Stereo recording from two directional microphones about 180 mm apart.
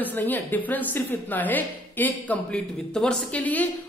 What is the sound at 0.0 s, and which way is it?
A woman's voice, 10° left (ahead or behind).